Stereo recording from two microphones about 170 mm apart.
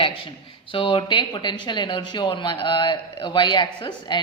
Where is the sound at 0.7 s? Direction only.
30° left (ahead or behind).